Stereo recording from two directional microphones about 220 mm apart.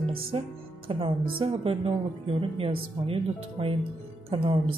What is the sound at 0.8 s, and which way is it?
Speech, 25° right (ahead or behind).